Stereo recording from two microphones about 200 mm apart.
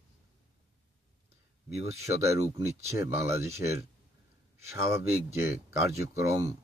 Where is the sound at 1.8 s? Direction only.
15° right (ahead or behind).